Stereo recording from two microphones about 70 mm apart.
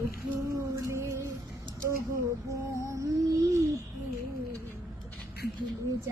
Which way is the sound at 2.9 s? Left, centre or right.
Right.